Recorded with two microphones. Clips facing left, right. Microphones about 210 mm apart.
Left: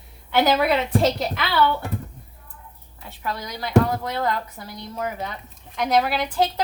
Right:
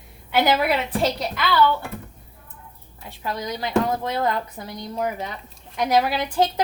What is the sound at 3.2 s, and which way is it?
A woman's voice, 20° right (ahead or behind).